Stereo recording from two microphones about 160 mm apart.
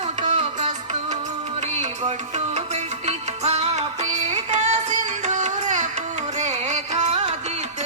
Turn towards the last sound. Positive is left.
turn(degrees=-45)  # may be behind; listen again after turning